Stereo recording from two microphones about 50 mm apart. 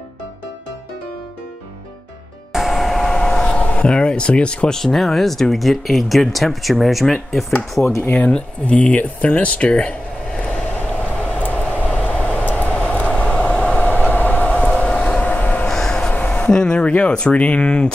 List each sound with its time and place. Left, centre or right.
2.5 s vehicle: centre
3.6 s speech: left
4.7 s speech: centre
8.0 s speech: left
8.3 s speech: left
10.7 s vehicle: left
12.9 s train: left
15.7 s a sound: centre
16.1 s a sound: left
16.4 s speech: centre